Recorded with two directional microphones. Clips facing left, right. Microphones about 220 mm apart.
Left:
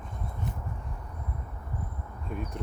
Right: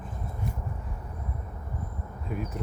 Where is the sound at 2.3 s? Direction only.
5° right (ahead or behind).